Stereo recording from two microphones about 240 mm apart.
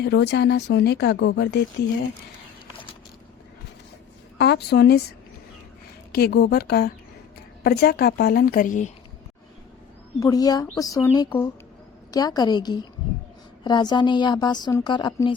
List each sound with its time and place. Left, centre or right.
0.0 s speech: left
4.4 s speech: left
6.1 s a woman's voice: left
10.2 s a woman's voice: centre